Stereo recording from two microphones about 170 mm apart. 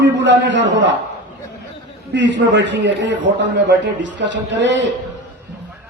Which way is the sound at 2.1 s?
90° right.